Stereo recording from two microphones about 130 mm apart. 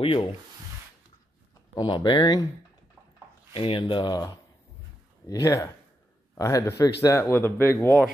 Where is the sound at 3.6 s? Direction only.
45° left (ahead or behind); by 7.6 s 20° left (ahead or behind).